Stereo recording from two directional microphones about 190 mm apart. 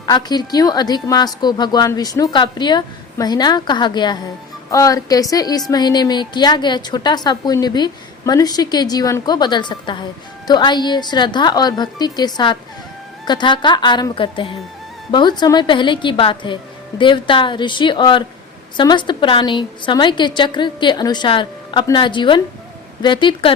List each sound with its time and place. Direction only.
0.0 s a woman's voice: 20° left (ahead or behind)